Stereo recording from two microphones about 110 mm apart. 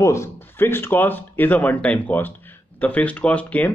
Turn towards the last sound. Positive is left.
turn(degrees=15)  # may be behind; listen again after turning